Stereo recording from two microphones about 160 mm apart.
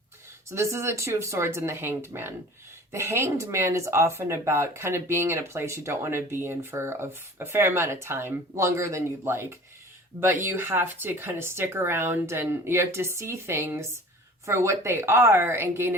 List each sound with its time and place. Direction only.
0.5 s speech: 15° right (ahead or behind)